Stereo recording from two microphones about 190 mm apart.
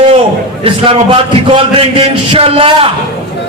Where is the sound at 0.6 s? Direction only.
30° right (ahead or behind).